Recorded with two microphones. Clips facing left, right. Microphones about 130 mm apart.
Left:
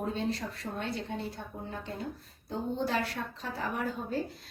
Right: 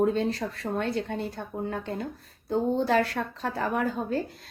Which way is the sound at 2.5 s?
80° right.